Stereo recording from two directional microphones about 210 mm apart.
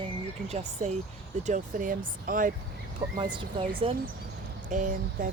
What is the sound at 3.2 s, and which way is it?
Speech, 20° right (ahead or behind).